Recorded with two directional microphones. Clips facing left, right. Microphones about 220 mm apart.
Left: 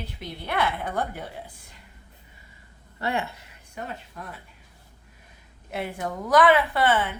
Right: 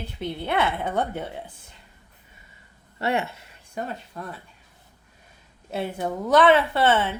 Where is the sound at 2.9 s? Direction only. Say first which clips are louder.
Right 3 dB; 25° right (ahead or behind).